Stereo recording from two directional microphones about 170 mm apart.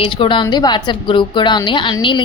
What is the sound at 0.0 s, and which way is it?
A woman's voice, 30° left (ahead or behind).